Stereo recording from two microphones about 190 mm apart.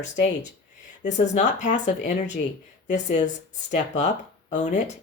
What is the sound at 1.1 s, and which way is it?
Speech, 40° left (ahead or behind).